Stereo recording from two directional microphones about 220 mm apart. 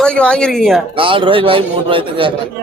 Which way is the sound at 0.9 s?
25° right (ahead or behind).